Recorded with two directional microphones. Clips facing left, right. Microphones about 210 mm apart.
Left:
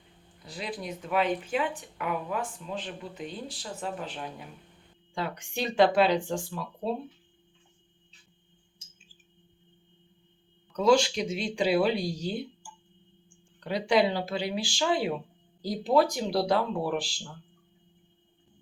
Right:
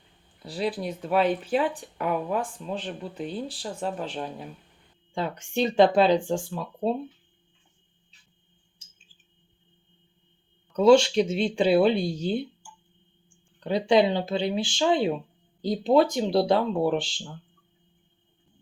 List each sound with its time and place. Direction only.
0.4 s speech: 35° right (ahead or behind)
10.8 s speech: 25° right (ahead or behind)
13.7 s speech: 25° right (ahead or behind)